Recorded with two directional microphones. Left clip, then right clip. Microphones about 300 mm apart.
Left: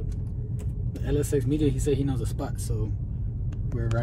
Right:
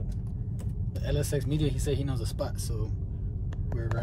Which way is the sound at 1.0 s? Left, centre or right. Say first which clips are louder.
Left 5 dB; centre.